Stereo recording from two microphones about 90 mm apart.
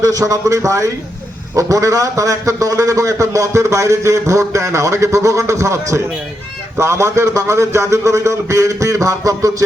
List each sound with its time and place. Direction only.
0.0 s a man's voice: 40° right (ahead or behind)